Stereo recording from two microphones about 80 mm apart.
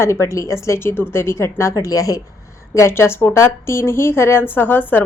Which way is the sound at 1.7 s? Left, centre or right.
Left.